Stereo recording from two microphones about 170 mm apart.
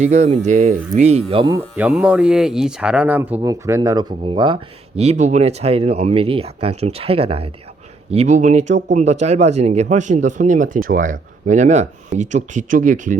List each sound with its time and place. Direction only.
0.0 s speech: 45° right (ahead or behind)
1.4 s speech: 25° right (ahead or behind)
1.7 s speech: 5° right (ahead or behind)
3.4 s speech: 20° right (ahead or behind); by 13.1 s 50° right (ahead or behind)